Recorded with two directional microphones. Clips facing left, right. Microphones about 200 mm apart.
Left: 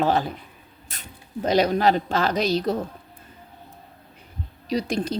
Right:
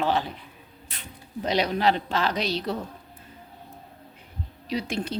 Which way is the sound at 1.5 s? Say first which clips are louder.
Left 4 dB; 45° left (ahead or behind).